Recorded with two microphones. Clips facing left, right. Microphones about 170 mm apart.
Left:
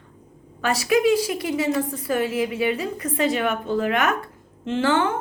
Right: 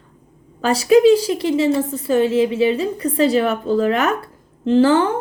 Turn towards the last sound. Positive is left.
turn(degrees=-35)  # may be behind; listen again after turning